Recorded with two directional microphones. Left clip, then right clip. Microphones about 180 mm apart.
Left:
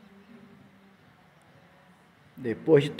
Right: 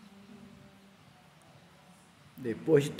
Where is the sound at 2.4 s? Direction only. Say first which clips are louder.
Left 5 dB; 20° left (ahead or behind).